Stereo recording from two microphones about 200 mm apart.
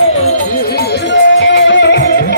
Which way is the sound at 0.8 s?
60° left (ahead or behind).